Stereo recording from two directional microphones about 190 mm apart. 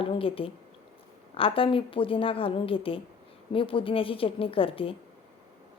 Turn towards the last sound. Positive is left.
turn(degrees=30)  # may be behind; listen again after turning